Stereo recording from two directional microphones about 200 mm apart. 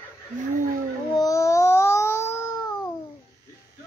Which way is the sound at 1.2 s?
15° left (ahead or behind).